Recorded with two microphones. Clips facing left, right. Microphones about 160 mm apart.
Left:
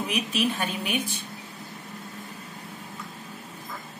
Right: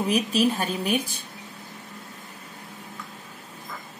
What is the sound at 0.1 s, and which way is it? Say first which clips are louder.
Speech: right 6 dB; 35° right (ahead or behind).